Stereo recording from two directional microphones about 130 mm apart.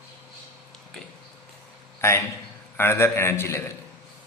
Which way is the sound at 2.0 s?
20° left (ahead or behind).